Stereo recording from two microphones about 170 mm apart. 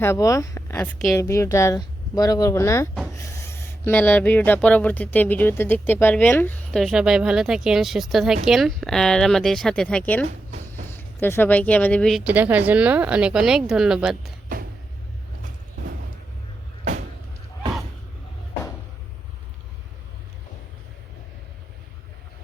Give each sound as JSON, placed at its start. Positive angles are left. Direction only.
{"t": 0.0, "sound": "speech", "side_deg": 15}
{"t": 12.2, "sound": "a woman's voice", "side_deg": -10}
{"t": 14.5, "sound": "vehicle", "side_deg": -55}